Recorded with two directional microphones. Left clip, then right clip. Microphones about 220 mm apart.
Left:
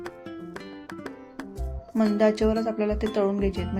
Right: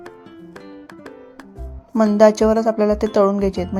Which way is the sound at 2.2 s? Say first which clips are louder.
Right 10 dB; 30° right (ahead or behind).